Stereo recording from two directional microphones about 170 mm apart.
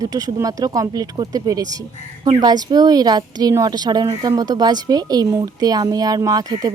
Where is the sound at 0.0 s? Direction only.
20° right (ahead or behind).